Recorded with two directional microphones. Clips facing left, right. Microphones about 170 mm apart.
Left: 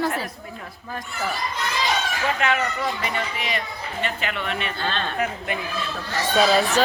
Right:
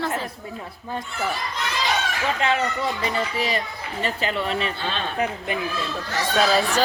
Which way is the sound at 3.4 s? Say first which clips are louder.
Right 3 dB; 35° right (ahead or behind).